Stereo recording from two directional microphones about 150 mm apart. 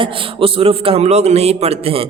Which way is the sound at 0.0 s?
35° right (ahead or behind).